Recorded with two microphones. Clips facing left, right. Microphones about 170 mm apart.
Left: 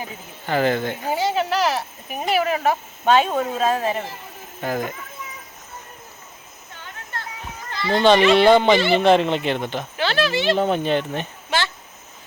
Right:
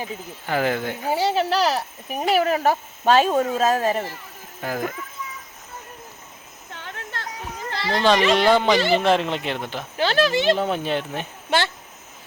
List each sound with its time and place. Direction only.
0.4 s speech: 5° right (ahead or behind)
1.1 s speech: 30° right (ahead or behind)
4.6 s speech: centre (ahead or behind)
6.7 s a sound: 80° right
7.9 s speech: centre (ahead or behind)
10.0 s speech: 40° right (ahead or behind)
10.6 s speech: 5° right (ahead or behind)